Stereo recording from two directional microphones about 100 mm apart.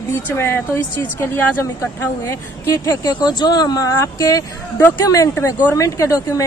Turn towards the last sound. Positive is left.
turn(degrees=35)  # may be behind; listen again after turning